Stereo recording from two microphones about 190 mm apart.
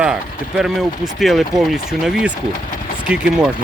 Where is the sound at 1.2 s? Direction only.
Centre (ahead or behind).